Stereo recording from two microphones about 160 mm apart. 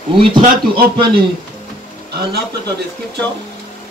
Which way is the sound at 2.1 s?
90° right.